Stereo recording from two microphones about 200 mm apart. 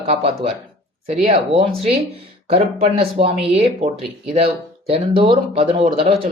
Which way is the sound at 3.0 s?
30° right (ahead or behind).